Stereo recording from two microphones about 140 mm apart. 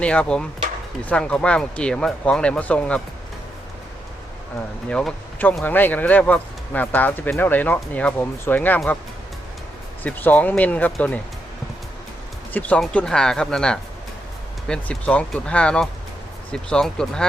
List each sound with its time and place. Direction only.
0.0 s speech: 10° left (ahead or behind)
4.9 s speech: 5° left (ahead or behind)
10.0 s speech: 10° left (ahead or behind)
12.5 s speech: 10° left (ahead or behind)